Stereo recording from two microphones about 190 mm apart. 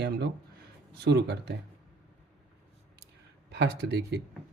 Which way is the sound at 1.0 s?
60° right (ahead or behind).